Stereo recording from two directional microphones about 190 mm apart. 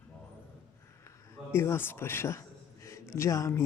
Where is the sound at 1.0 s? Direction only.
15° left (ahead or behind).